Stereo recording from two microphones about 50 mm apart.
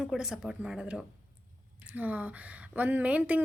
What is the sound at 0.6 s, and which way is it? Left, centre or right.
Speech, right.